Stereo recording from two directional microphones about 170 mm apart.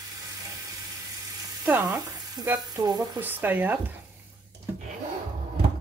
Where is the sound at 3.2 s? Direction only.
10° right (ahead or behind).